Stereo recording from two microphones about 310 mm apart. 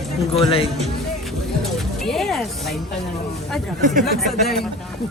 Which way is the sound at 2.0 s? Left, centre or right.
Centre.